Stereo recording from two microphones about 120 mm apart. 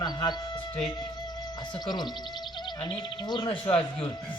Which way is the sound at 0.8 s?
35° left (ahead or behind).